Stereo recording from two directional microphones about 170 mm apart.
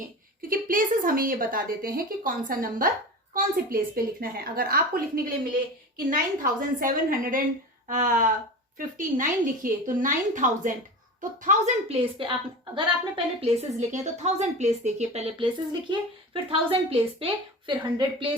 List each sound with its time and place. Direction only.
0.4 s a woman's voice: 55° right (ahead or behind)
12.2 s a woman's voice: 30° right (ahead or behind)